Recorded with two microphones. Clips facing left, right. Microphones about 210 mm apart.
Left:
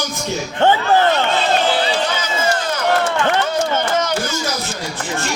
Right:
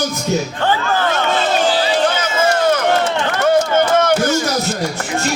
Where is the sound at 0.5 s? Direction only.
20° left (ahead or behind).